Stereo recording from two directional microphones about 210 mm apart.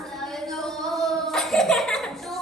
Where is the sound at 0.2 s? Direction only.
Centre (ahead or behind).